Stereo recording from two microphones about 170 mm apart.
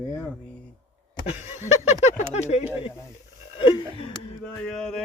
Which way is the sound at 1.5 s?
45° left (ahead or behind).